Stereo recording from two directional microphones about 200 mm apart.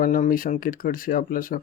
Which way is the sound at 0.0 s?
40° left (ahead or behind).